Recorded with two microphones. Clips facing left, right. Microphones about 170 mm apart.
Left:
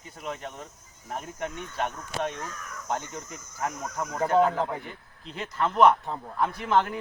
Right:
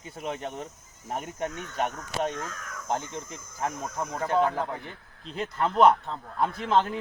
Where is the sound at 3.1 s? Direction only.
30° right (ahead or behind).